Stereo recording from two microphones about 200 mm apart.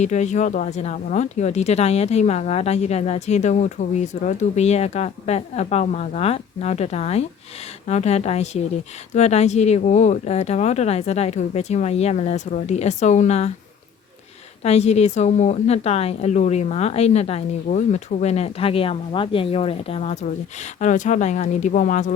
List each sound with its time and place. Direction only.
0.0 s speech: 35° left (ahead or behind)
14.6 s speech: 30° left (ahead or behind)